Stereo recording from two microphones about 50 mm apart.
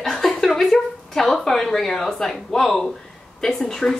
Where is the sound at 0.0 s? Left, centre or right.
Centre.